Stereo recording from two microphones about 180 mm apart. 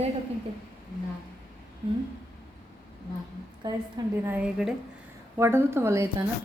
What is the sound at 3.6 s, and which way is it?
Speech, 25° right (ahead or behind).